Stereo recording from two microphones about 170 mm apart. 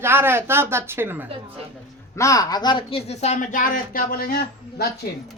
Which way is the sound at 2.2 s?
20° left (ahead or behind).